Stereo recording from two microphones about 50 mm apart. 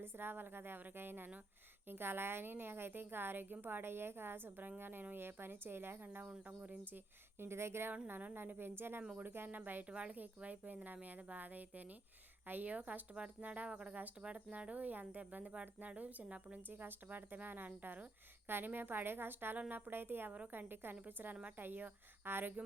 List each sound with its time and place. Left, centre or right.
0.0 s a woman's voice: right
6.6 s speech: right
7.3 s speech: right
8.0 s a woman's voice: right
9.9 s a woman's voice: right